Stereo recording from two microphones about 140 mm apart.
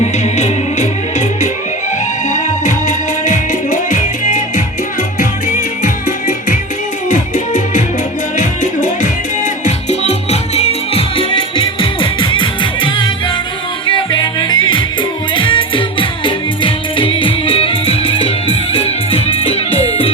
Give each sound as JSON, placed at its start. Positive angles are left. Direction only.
{"t": 0.0, "sound": "music", "side_deg": 55}